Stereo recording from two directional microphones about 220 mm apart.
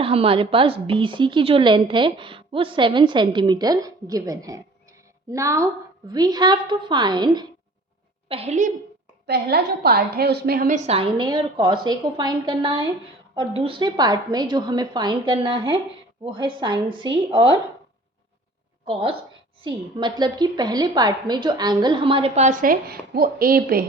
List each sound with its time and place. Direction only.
0.0 s a woman's voice: 25° right (ahead or behind)
9.2 s a woman's voice: 45° right (ahead or behind)
10.8 s a woman's voice: 25° right (ahead or behind)
18.9 s a woman's voice: 25° right (ahead or behind); by 23.8 s 40° right (ahead or behind)